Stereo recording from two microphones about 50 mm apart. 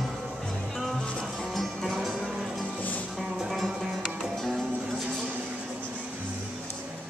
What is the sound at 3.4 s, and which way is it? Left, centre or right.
Music, centre.